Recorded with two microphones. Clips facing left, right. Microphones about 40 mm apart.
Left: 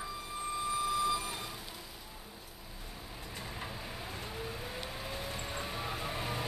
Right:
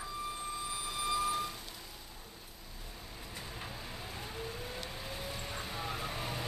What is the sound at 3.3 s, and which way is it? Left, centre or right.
Vehicle, centre.